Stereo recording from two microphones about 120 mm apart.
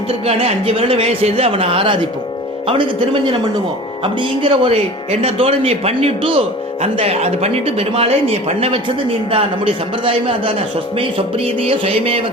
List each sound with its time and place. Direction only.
0.3 s speech: 55° right (ahead or behind)